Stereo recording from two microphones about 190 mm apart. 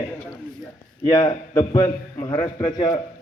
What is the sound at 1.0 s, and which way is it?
A man's voice, 25° left (ahead or behind).